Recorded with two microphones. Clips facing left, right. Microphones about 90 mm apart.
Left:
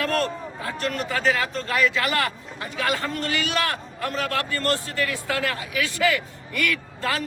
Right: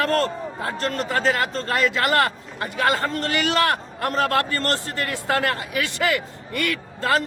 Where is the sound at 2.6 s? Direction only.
45° right (ahead or behind).